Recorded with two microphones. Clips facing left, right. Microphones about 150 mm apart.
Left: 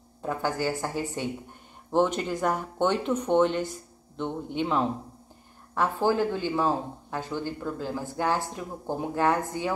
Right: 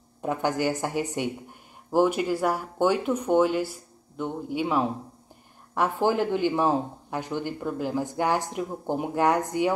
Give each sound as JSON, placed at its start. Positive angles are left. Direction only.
{"t": 0.2, "sound": "speech", "side_deg": -20}